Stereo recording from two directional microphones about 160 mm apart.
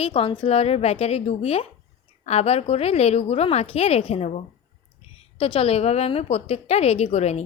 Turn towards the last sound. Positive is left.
turn(degrees=45)  # may be behind; listen again after turning